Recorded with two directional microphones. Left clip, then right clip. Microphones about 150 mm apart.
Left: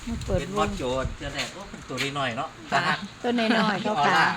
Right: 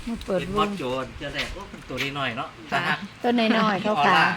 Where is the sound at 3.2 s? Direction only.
90° right.